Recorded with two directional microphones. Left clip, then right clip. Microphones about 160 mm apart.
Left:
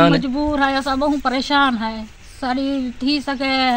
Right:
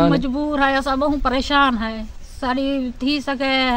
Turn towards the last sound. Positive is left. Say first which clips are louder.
# left 1 dB
turn(degrees=-35)  # may be behind; listen again after turning